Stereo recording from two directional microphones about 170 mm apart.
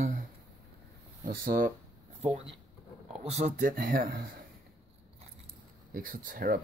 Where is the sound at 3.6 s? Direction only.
55° right (ahead or behind).